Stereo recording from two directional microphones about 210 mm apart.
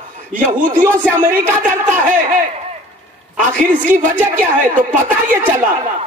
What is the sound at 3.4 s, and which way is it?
Speech, 35° right (ahead or behind).